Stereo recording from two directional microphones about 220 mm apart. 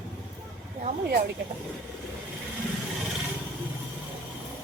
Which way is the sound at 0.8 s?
45° right (ahead or behind).